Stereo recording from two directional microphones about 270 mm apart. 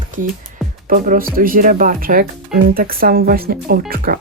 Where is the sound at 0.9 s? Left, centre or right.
Right.